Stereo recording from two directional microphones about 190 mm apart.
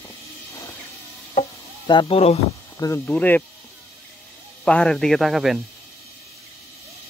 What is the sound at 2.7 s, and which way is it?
Speech, 15° left (ahead or behind).